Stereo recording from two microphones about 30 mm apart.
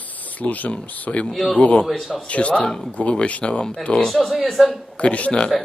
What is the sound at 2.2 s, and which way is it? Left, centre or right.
Speech, left.